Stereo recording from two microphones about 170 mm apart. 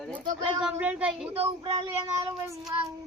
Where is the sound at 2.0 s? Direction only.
15° right (ahead or behind).